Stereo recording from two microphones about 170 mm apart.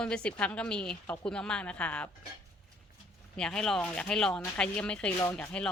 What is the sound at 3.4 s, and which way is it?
A woman's voice, 5° left (ahead or behind).